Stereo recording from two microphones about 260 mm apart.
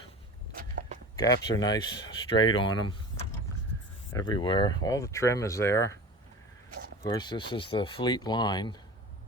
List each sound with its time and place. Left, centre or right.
0.5 s walk: right
1.1 s speech: centre
4.1 s speech: centre
7.0 s speech: centre